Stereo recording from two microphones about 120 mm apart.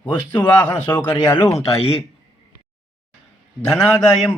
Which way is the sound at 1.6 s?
55° left (ahead or behind).